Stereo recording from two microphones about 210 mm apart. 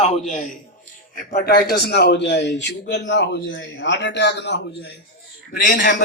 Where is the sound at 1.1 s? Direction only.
45° left (ahead or behind).